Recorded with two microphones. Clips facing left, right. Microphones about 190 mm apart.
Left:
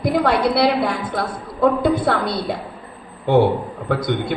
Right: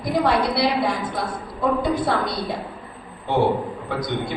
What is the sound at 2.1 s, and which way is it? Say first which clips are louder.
Speech: left 3 dB; 65° left (ahead or behind).